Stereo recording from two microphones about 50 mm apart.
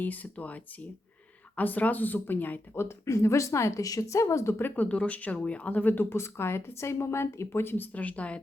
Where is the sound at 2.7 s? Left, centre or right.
Left.